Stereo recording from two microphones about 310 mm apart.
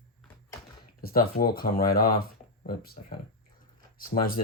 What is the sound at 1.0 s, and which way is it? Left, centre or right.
Speech, left.